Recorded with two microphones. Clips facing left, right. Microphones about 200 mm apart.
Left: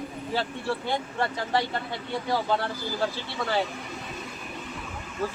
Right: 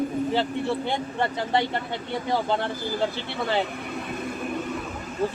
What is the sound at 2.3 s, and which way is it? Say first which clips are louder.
Speech: right 2 dB; 20° right (ahead or behind).